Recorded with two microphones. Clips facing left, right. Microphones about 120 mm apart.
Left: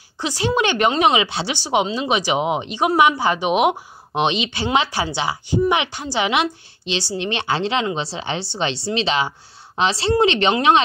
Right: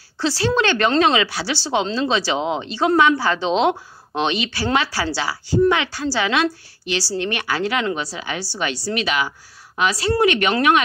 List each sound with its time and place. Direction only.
0.2 s speech: 15° left (ahead or behind)